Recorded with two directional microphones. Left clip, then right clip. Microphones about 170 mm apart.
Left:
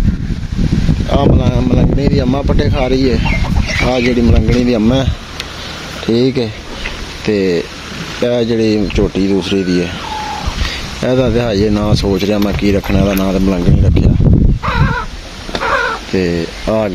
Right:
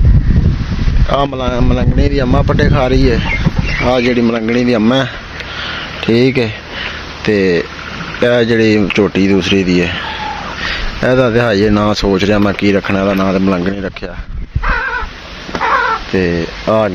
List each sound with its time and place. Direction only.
1.1 s speech: 15° left (ahead or behind)
16.1 s speech: 15° left (ahead or behind)
16.7 s speech: centre (ahead or behind)